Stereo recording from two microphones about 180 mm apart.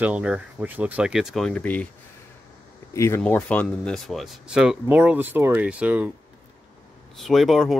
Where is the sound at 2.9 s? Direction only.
15° left (ahead or behind); by 6.1 s 5° right (ahead or behind).